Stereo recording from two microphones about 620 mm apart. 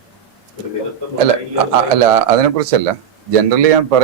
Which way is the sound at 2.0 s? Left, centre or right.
Right.